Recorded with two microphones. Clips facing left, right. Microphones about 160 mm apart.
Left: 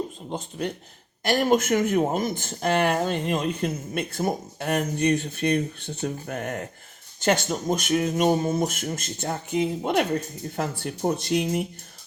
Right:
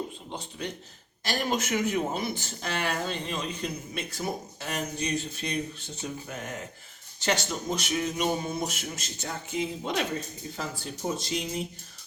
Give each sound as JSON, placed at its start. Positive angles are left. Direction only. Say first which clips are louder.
{"t": 0.3, "sound": "speech", "louder": "left 6 dB", "side_deg": 45}